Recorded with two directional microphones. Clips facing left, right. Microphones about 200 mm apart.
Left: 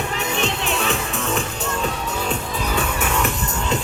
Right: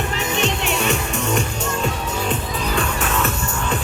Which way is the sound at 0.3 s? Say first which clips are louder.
Right 2 dB; centre (ahead or behind).